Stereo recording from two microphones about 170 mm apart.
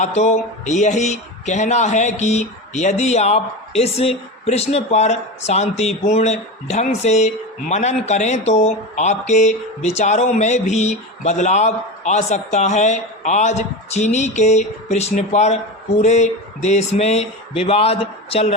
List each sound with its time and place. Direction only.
0.0 s speech: 40° left (ahead or behind)